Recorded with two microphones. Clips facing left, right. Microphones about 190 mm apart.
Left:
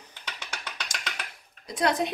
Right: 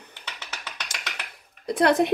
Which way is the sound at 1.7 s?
60° right (ahead or behind).